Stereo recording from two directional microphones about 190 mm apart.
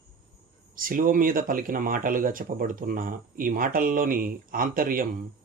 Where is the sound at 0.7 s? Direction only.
45° right (ahead or behind).